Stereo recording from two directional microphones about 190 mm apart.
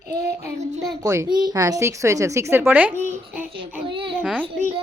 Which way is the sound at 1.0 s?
15° right (ahead or behind).